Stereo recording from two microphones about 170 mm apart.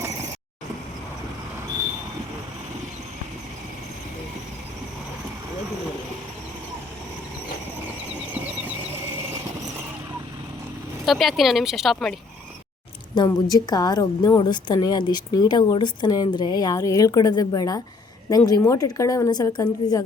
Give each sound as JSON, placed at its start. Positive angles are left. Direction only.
{"t": 11.0, "sound": "speech", "side_deg": 0}
{"t": 13.1, "sound": "a woman's voice", "side_deg": 25}